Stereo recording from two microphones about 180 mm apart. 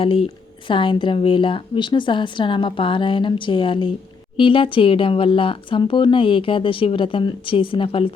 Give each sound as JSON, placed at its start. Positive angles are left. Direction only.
{"t": 0.0, "sound": "speech", "side_deg": 30}